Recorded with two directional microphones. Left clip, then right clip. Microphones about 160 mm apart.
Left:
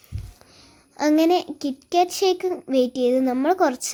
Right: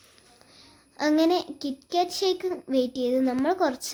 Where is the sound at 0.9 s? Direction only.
20° left (ahead or behind).